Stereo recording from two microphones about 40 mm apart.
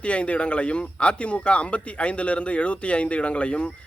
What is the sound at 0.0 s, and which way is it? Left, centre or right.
Speech, left.